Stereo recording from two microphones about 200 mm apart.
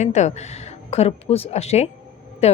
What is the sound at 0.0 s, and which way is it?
A woman's voice, 35° left (ahead or behind).